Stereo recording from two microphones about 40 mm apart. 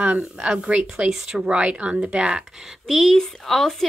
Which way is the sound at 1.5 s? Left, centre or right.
Right.